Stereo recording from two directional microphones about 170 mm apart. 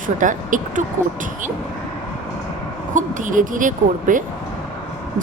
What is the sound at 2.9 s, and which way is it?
Speech, 50° right (ahead or behind).